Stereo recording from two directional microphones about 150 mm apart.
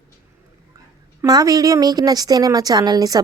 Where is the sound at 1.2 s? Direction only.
25° right (ahead or behind).